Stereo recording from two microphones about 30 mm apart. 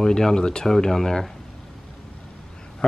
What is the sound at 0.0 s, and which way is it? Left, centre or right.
Speech, left.